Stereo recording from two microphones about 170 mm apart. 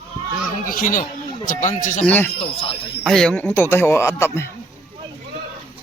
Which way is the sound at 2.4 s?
35° left (ahead or behind).